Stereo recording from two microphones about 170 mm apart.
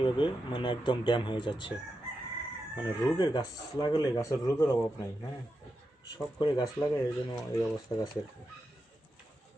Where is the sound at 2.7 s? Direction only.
25° left (ahead or behind).